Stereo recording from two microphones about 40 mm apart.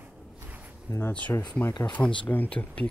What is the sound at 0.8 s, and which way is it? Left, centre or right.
Speech, left.